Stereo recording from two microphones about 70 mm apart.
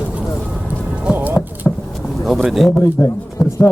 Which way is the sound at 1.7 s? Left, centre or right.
Left.